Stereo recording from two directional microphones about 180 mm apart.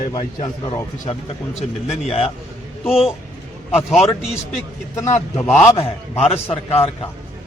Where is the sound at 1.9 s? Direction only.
35° left (ahead or behind).